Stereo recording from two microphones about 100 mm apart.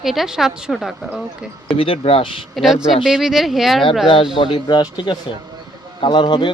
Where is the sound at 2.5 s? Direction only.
Centre (ahead or behind).